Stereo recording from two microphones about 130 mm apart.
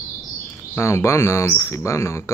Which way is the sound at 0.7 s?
20° left (ahead or behind).